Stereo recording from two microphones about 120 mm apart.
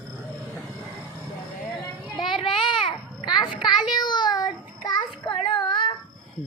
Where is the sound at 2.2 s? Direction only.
45° left (ahead or behind).